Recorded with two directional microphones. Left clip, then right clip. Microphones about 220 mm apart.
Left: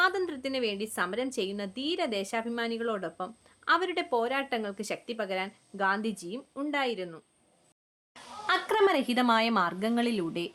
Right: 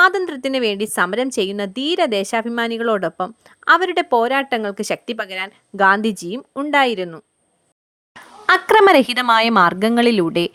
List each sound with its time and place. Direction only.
0.0 s a woman's voice: 40° right (ahead or behind)
8.4 s a woman's voice: 40° right (ahead or behind)